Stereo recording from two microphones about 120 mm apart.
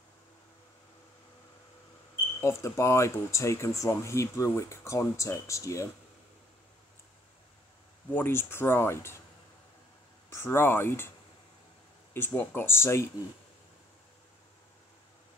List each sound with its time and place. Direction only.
2.4 s speech: 25° left (ahead or behind)
8.1 s speech: 20° left (ahead or behind)
10.3 s speech: 20° left (ahead or behind)
12.1 s speech: 15° left (ahead or behind)